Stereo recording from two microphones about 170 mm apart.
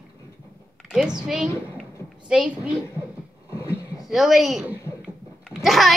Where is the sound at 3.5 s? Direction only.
15° left (ahead or behind).